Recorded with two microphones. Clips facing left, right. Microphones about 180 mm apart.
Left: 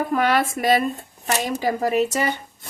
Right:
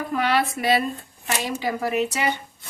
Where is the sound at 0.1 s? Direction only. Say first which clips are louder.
Right 1 dB; 45° left (ahead or behind).